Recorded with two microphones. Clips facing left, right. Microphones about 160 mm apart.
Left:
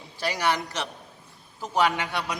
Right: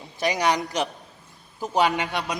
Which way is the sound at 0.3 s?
15° right (ahead or behind).